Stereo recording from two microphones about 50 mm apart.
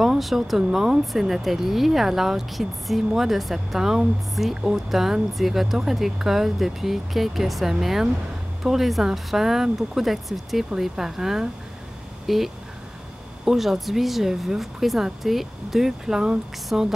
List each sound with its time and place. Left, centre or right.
0.0 s speech: centre
13.5 s speech: centre